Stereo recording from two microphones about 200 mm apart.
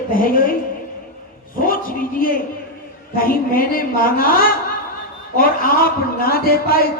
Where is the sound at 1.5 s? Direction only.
45° left (ahead or behind).